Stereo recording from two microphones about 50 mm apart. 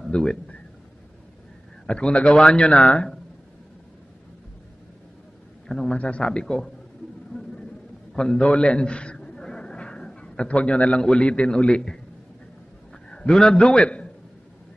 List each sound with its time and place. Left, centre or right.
0.0 s a man's voice: centre
1.9 s a man's voice: left
5.7 s a man's voice: centre
5.9 s a man's voice: left
6.4 s a man's voice: centre
8.1 s a sound: centre
11.1 s a man's voice: left
13.1 s a man's voice: centre